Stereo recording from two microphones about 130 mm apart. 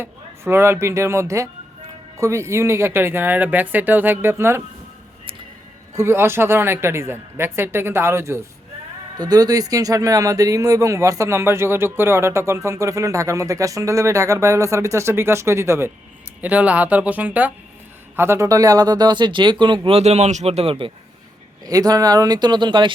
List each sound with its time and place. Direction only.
0.0 s speech: 20° right (ahead or behind)
5.9 s speech: 20° right (ahead or behind)
9.1 s speech: 30° right (ahead or behind)
21.6 s speech: 30° right (ahead or behind)